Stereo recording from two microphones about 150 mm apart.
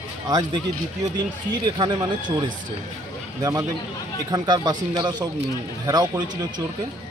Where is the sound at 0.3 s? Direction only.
25° right (ahead or behind).